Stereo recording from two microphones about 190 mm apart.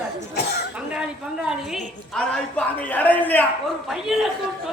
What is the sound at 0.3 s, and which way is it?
Cough, 60° left (ahead or behind).